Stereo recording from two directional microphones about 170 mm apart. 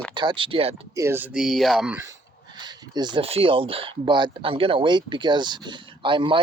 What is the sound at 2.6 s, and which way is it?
Speech, 25° right (ahead or behind).